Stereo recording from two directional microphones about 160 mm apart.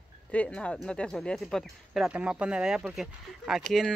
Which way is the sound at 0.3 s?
10° left (ahead or behind).